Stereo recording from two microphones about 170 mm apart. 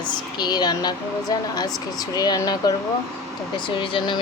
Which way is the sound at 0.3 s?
25° left (ahead or behind).